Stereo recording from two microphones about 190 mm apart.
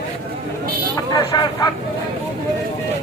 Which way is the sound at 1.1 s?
20° left (ahead or behind).